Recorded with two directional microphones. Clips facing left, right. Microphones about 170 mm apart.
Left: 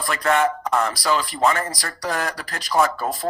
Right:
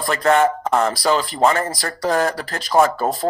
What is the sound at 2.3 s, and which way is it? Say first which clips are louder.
Speech: right 4 dB; 25° right (ahead or behind).